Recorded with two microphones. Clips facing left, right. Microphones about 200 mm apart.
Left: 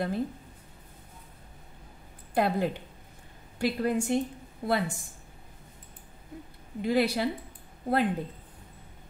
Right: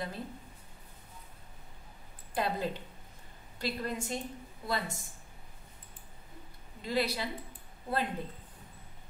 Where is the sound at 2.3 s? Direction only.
60° left (ahead or behind).